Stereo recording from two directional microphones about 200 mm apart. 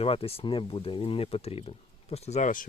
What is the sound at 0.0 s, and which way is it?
Speech, 30° left (ahead or behind).